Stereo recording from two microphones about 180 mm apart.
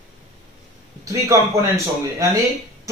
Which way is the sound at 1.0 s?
15° right (ahead or behind).